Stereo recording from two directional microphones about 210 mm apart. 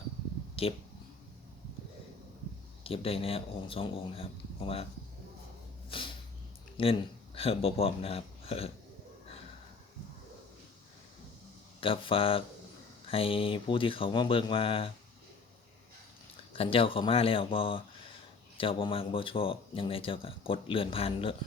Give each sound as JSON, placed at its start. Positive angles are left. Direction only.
{"t": 0.6, "sound": "speech", "side_deg": 25}
{"t": 2.8, "sound": "speech", "side_deg": 25}
{"t": 5.9, "sound": "a sound", "side_deg": 25}
{"t": 6.8, "sound": "speech", "side_deg": 25}
{"t": 11.8, "sound": "speech", "side_deg": 25}
{"t": 16.5, "sound": "speech", "side_deg": 25}